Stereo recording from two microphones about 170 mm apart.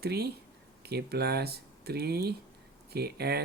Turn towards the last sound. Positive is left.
turn(degrees=-70)  # may be behind; listen again after turning